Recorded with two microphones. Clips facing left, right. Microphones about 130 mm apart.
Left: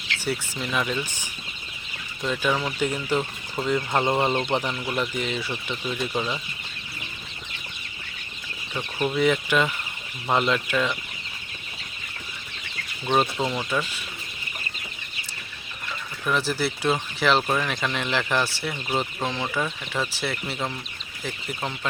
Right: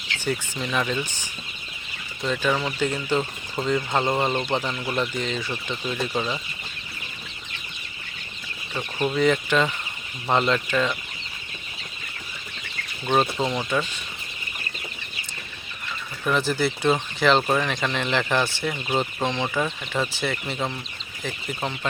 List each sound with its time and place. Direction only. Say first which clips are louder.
0.3 s speech: right 2 dB; 5° left (ahead or behind)
2.2 s speech: right 1 dB; 5° left (ahead or behind)
3.2 s speech: right 1 dB; centre (ahead or behind)
3.9 s speech: left 2 dB; 10° left (ahead or behind)
4.8 s speech: right 1 dB; centre (ahead or behind)
5.1 s speech: even; 10° left (ahead or behind)
8.7 s speech: right 1 dB; centre (ahead or behind)
13.1 s speech: right 1 dB; centre (ahead or behind)
16.2 s speech: right 2 dB; centre (ahead or behind)